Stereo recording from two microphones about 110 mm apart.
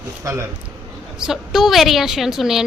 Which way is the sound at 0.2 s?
30° right (ahead or behind).